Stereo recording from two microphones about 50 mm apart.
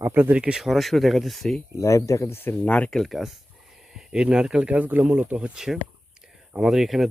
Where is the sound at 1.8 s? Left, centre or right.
Left.